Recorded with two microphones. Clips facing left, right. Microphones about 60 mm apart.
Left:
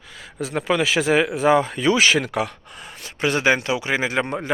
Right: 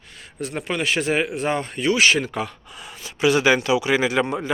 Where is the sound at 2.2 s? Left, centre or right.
Left.